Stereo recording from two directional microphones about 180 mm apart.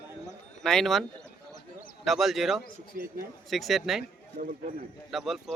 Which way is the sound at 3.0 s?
55° right (ahead or behind).